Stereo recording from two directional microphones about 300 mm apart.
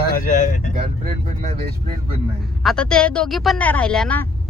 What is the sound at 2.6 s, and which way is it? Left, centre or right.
Speech, centre.